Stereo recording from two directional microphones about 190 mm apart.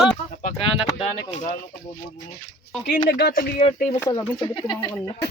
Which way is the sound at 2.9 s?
55° left (ahead or behind).